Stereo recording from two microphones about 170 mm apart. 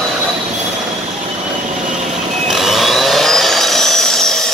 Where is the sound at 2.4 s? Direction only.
Centre (ahead or behind).